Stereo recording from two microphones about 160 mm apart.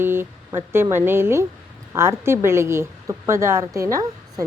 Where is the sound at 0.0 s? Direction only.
15° right (ahead or behind).